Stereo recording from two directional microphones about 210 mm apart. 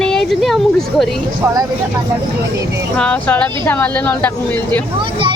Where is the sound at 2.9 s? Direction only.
5° left (ahead or behind).